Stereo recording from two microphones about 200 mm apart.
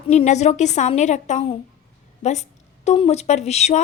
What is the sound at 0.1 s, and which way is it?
A woman's voice, 35° left (ahead or behind).